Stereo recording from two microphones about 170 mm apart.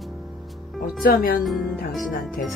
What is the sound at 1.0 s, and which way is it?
Speech, 60° left (ahead or behind).